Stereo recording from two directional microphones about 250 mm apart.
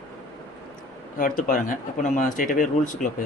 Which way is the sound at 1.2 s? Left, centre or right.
Left.